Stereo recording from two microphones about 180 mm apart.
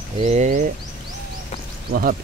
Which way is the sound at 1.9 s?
55° right (ahead or behind).